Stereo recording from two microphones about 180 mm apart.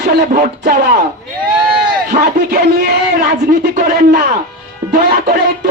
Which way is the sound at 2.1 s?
60° right (ahead or behind).